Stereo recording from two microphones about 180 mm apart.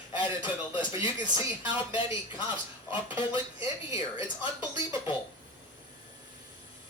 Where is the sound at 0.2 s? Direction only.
25° left (ahead or behind).